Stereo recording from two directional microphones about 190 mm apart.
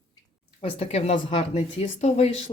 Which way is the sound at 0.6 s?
30° left (ahead or behind).